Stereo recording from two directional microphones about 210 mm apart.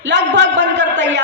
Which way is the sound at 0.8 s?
55° right (ahead or behind).